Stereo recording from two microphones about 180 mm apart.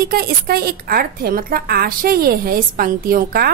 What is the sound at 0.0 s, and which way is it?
A woman's voice, 55° right (ahead or behind).